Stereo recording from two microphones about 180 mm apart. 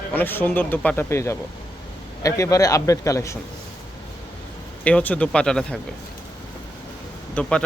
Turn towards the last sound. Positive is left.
turn(degrees=5)  # may be behind; listen again after turning